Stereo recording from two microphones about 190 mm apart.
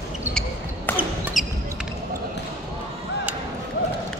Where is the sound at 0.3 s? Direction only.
5° left (ahead or behind).